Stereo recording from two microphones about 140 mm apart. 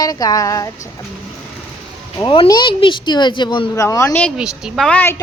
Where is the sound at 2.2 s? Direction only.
35° left (ahead or behind).